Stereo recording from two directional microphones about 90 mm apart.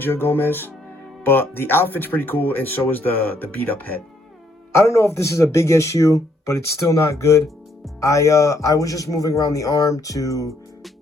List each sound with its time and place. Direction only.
0.0 s speech: 25° left (ahead or behind)
4.7 s speech: 35° left (ahead or behind)